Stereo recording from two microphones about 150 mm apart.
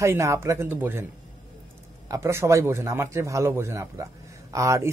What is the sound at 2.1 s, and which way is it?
Speech, 15° right (ahead or behind).